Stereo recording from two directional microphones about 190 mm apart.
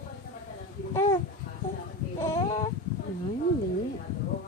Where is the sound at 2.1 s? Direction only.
15° left (ahead or behind).